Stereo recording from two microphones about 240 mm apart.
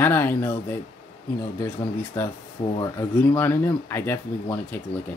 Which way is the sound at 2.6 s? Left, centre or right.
Left.